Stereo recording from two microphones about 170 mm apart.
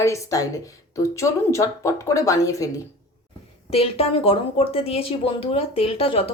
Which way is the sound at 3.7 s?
35° left (ahead or behind).